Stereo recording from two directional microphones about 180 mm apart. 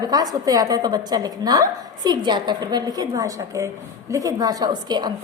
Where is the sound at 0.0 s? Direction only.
20° right (ahead or behind).